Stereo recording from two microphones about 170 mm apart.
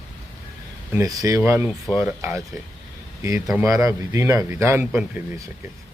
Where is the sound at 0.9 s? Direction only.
20° right (ahead or behind).